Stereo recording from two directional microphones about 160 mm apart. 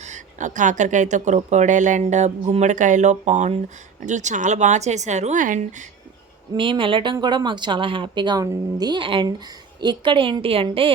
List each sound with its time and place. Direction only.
0.0 s speech: 50° right (ahead or behind)
6.5 s a woman's voice: 30° right (ahead or behind)